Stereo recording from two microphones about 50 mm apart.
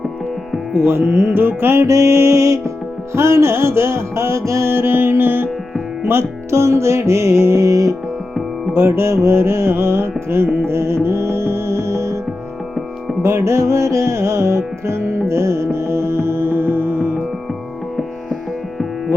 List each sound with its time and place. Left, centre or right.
0.9 s music: right
1.4 s music: right
4.7 s music: right
8.7 s music: right
13.2 s music: right